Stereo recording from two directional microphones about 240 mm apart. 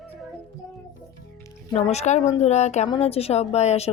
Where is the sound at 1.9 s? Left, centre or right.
Left.